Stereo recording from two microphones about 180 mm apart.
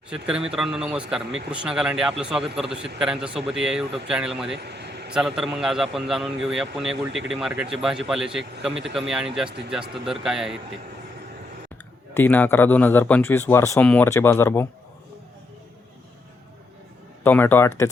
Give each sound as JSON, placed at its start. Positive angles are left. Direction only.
{"t": 0.1, "sound": "a man's voice", "side_deg": -5}
{"t": 4.5, "sound": "vehicle", "side_deg": -70}
{"t": 5.1, "sound": "a man's voice", "side_deg": -5}
{"t": 12.1, "sound": "speech", "side_deg": 10}
{"t": 17.2, "sound": "speech", "side_deg": 10}